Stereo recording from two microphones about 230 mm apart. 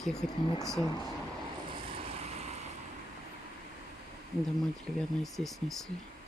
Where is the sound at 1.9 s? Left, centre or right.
Right.